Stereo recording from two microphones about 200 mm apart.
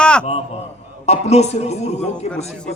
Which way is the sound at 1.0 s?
35° left (ahead or behind).